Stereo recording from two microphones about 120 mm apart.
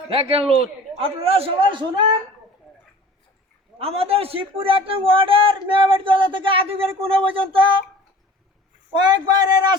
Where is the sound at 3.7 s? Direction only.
55° right (ahead or behind).